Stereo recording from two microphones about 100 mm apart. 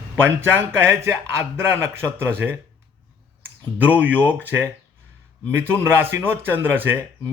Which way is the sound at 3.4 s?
15° right (ahead or behind).